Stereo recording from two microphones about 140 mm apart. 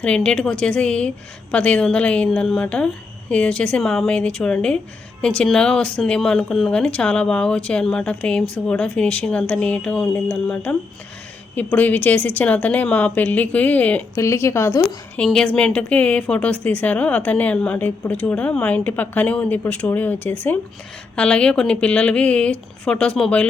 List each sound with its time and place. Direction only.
0.0 s a woman's voice: 5° left (ahead or behind)
15.1 s a woman's voice: 5° left (ahead or behind)